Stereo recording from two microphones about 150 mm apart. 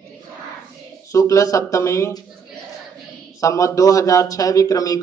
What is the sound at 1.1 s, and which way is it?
Speech, 20° left (ahead or behind).